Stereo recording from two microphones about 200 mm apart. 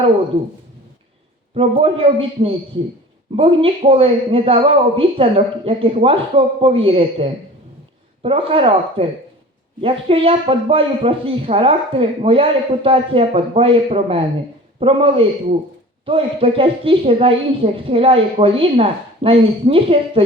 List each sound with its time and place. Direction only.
1.5 s speech: 25° right (ahead or behind)